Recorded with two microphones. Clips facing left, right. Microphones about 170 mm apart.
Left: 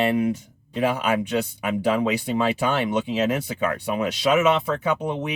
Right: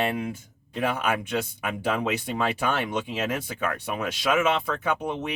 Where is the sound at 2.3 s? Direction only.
20° left (ahead or behind).